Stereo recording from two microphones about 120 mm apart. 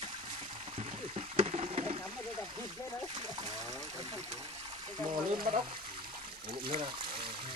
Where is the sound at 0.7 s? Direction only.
55° right (ahead or behind).